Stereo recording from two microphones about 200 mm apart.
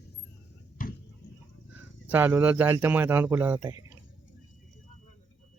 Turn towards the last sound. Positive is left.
turn(degrees=-15)  # may be behind; listen again after turning